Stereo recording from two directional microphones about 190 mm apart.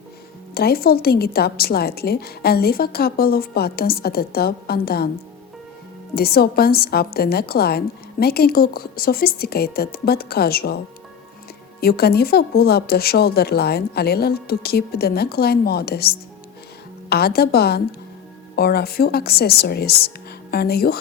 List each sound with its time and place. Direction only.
0.5 s a woman's voice: 55° left (ahead or behind)
6.1 s a woman's voice: 55° left (ahead or behind)
11.8 s speech: 55° left (ahead or behind)